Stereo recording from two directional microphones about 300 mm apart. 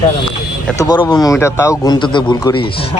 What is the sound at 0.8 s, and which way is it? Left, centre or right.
Speech, centre.